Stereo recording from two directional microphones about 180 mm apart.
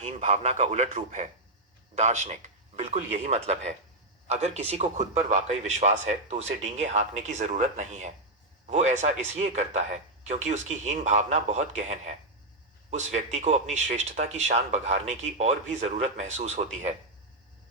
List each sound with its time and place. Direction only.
0.0 s speech: 40° right (ahead or behind)